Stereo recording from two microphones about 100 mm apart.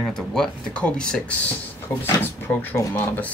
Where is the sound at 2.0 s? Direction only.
20° left (ahead or behind).